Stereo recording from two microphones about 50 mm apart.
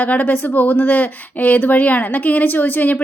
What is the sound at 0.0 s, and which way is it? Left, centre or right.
Speech, left.